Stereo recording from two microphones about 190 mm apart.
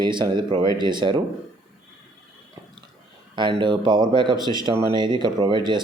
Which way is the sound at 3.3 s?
25° right (ahead or behind).